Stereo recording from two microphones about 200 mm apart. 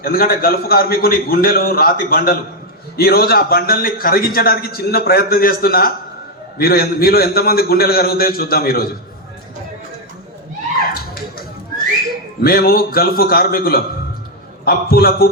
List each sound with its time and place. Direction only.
0.0 s a man's voice: 50° left (ahead or behind)
12.4 s a man's voice: 50° left (ahead or behind)